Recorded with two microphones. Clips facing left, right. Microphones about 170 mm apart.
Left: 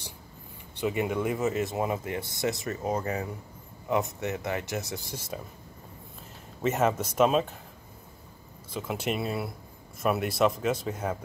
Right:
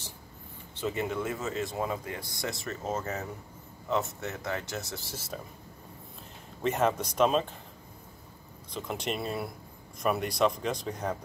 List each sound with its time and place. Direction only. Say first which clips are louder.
0.7 s speech: left 3 dB; 15° left (ahead or behind)
5.3 s speech: left 2 dB; 5° left (ahead or behind)
6.6 s speech: left 2 dB; 5° left (ahead or behind)
8.7 s speech: left 3 dB; 5° left (ahead or behind)